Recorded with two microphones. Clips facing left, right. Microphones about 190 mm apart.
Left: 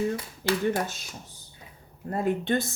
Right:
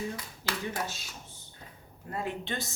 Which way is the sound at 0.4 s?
60° left (ahead or behind).